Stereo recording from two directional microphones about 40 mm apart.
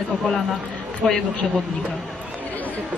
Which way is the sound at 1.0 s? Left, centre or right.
Left.